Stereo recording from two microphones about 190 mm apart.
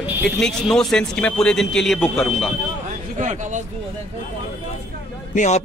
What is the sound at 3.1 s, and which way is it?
Speech, 40° right (ahead or behind).